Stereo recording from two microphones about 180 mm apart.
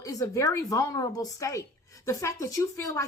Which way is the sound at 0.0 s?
20° left (ahead or behind).